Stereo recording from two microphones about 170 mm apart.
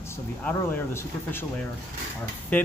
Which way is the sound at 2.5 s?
10° left (ahead or behind).